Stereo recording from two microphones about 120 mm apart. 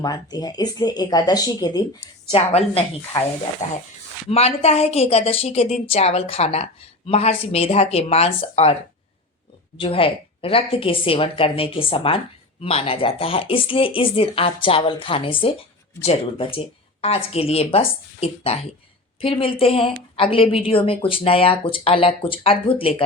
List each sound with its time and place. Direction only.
0.0 s speech: 35° left (ahead or behind)
2.3 s a woman's voice: 55° left (ahead or behind)
3.6 s speech: 90° left
4.3 s a woman's voice: 60° left (ahead or behind)
9.7 s a woman's voice: 50° left (ahead or behind)